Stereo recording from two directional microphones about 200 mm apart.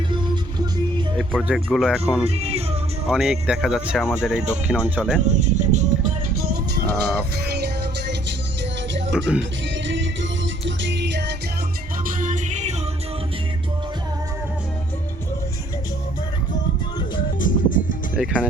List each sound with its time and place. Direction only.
1.3 s speech: centre (ahead or behind)
2.2 s speech: 30° right (ahead or behind)
3.1 s speech: centre (ahead or behind)
5.3 s music: 35° right (ahead or behind); by 9.1 s 65° right (ahead or behind)
9.1 s speech: 5° right (ahead or behind)
9.4 s music: 65° right (ahead or behind)
12.0 s music: 40° right (ahead or behind)
17.4 s music: 40° left (ahead or behind)
18.2 s speech: 5° right (ahead or behind)